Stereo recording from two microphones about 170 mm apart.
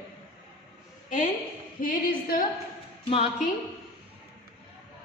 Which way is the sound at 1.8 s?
55° left (ahead or behind).